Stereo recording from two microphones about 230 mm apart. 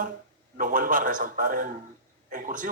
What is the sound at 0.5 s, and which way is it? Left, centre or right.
A man's voice, right.